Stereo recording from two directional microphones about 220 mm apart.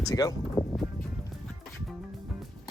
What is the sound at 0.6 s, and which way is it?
Music, 15° left (ahead or behind).